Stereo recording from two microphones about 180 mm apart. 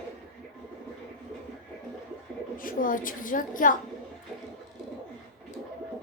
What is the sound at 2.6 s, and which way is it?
A woman's voice, 50° left (ahead or behind).